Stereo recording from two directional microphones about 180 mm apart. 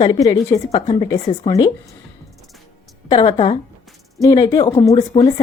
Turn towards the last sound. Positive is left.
turn(degrees=20)  # may be behind; listen again after turning